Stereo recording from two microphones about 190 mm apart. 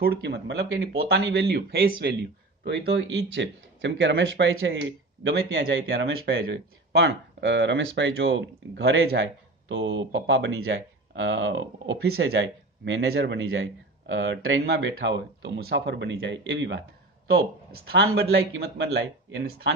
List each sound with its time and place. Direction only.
0.0 s speech: 55° right (ahead or behind)
3.3 s speech: 70° right (ahead or behind)
5.2 s speech: 60° right (ahead or behind)
18.3 s speech: 85° right; by 19.7 s 65° right (ahead or behind)